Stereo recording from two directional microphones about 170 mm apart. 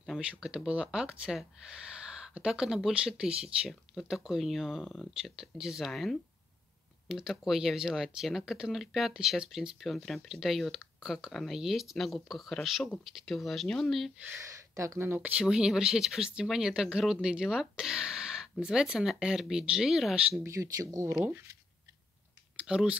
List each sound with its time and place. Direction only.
0.0 s speech: 5° right (ahead or behind)
14.2 s speech: 15° right (ahead or behind)
20.4 s speech: 20° right (ahead or behind)
22.6 s speech: 5° right (ahead or behind)